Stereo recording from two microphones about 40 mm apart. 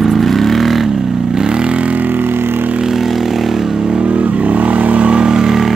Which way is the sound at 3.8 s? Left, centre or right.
Right.